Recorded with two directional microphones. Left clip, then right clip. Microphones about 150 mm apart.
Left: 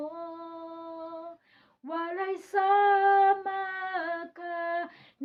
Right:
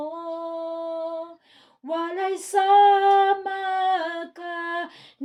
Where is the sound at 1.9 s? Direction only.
25° right (ahead or behind).